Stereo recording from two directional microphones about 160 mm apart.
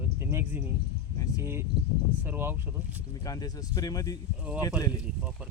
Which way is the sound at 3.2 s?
25° left (ahead or behind).